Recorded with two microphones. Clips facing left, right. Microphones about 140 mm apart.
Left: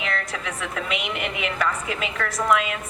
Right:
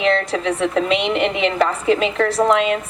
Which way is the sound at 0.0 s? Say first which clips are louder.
Right 11 dB; 30° right (ahead or behind).